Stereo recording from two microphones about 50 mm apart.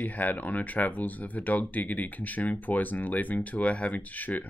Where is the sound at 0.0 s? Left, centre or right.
Left.